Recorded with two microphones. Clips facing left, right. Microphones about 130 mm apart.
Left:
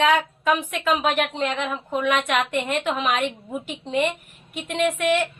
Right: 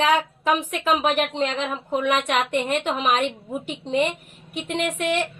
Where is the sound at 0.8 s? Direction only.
25° right (ahead or behind).